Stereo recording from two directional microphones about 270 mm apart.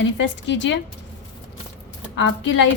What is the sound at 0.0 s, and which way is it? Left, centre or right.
Speech, left.